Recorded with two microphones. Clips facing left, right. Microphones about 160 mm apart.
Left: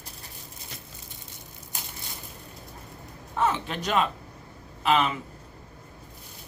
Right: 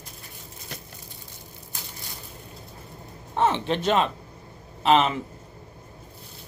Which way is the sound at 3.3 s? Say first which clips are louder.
Right 4 dB; 30° right (ahead or behind).